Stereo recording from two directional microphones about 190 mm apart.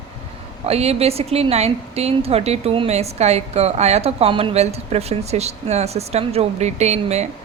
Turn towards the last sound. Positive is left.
turn(degrees=-35)  # may be behind; listen again after turning